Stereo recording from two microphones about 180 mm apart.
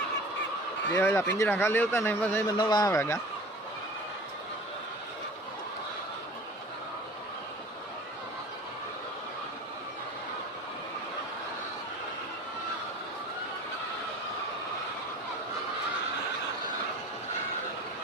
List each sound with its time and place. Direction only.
0.9 s speech: 15° left (ahead or behind)
2.6 s speech: 25° left (ahead or behind)